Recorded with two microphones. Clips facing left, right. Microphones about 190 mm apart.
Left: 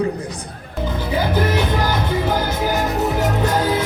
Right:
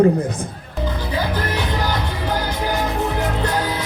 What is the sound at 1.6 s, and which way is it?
Music, 50° left (ahead or behind).